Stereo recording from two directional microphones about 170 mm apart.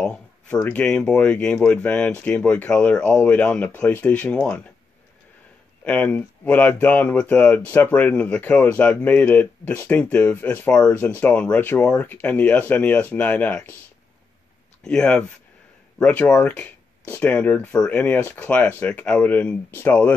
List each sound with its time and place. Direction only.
0.0 s a sound: 10° left (ahead or behind)
0.6 s speech: 10° left (ahead or behind)
5.9 s speech: 5° left (ahead or behind)
14.8 s speech: 5° left (ahead or behind)